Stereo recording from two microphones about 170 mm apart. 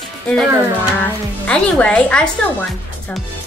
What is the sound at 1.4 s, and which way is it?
Speech, 5° left (ahead or behind).